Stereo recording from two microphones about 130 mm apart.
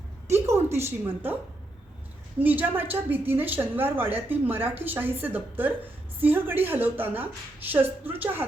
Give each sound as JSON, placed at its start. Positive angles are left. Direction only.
{"t": 0.3, "sound": "a woman's voice", "side_deg": -20}
{"t": 2.4, "sound": "a woman's voice", "side_deg": -15}